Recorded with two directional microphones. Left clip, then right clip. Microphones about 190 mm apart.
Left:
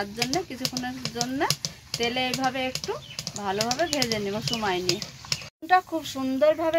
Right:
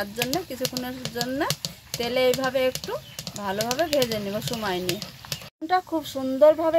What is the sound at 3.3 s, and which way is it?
Speech, 75° right (ahead or behind).